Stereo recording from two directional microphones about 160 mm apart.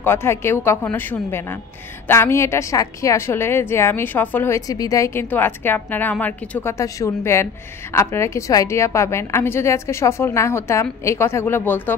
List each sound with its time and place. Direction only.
0.0 s a woman's voice: 15° left (ahead or behind)